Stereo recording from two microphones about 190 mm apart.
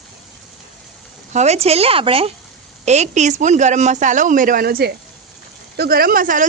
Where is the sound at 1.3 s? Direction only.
35° right (ahead or behind).